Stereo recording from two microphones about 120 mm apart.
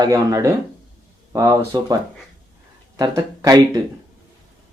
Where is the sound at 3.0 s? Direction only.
30° right (ahead or behind).